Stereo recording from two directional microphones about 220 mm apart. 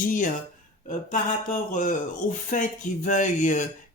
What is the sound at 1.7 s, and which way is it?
Speech, 35° left (ahead or behind).